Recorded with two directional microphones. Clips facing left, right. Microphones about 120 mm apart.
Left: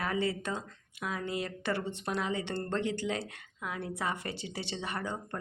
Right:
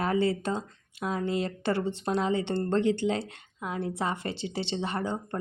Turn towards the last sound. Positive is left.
turn(degrees=-25)  # may be behind; listen again after turning